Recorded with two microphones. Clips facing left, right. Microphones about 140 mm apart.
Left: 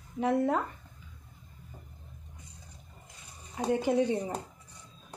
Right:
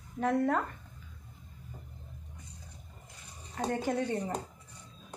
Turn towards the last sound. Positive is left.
turn(degrees=10)  # may be behind; listen again after turning